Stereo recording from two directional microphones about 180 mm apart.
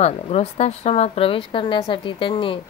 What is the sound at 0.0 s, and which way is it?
Speech, 35° left (ahead or behind).